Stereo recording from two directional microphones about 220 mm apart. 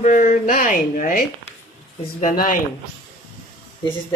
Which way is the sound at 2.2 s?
35° left (ahead or behind).